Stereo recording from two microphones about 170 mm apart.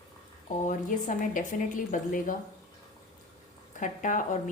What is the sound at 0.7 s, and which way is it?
Speech, 50° left (ahead or behind).